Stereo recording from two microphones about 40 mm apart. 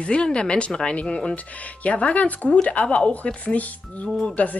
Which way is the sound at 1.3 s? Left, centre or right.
Left.